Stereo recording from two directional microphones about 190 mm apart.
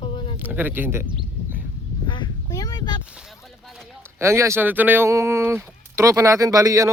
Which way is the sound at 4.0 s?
15° right (ahead or behind).